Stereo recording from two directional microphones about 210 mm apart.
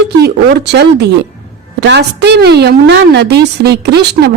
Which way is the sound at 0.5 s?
50° right (ahead or behind).